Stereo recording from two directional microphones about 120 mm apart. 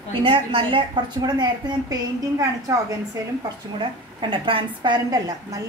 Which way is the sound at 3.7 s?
40° right (ahead or behind).